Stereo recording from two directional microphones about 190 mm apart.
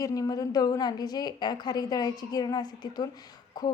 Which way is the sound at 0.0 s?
20° left (ahead or behind).